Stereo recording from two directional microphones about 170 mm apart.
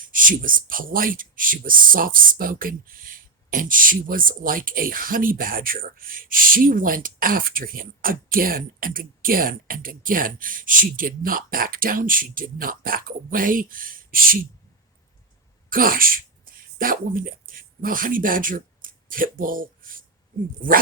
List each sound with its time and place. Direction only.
0.0 s speech: 50° right (ahead or behind)
15.7 s speech: 55° right (ahead or behind)